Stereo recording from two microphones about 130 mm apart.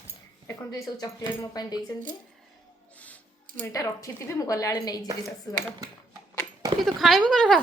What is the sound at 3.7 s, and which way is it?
Speech, 25° left (ahead or behind).